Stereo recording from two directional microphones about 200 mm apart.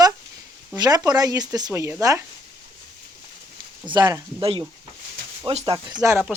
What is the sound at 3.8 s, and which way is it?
Speech, 20° right (ahead or behind).